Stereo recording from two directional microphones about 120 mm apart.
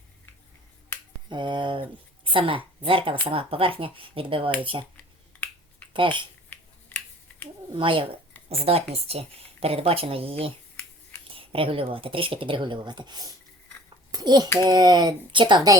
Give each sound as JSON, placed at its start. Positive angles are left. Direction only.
{"t": 1.3, "sound": "speech", "side_deg": -40}
{"t": 4.9, "sound": "finger snapping", "side_deg": 15}
{"t": 5.9, "sound": "speech", "side_deg": -45}
{"t": 6.5, "sound": "finger snapping", "side_deg": 15}
{"t": 7.7, "sound": "speech", "side_deg": -45}
{"t": 8.4, "sound": "a woman's voice", "side_deg": -55}